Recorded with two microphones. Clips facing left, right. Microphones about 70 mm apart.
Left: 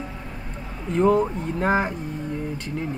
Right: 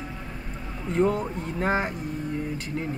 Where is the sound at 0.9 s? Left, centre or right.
Centre.